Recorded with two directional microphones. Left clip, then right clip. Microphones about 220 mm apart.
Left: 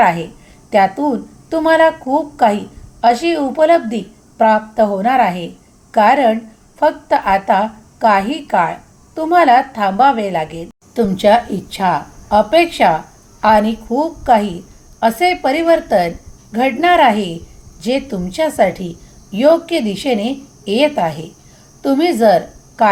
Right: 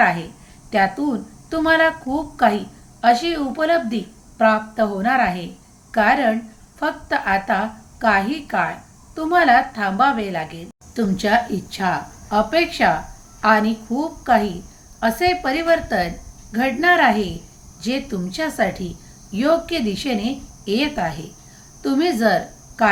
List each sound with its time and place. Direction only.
0.0 s a woman's voice: 15° left (ahead or behind)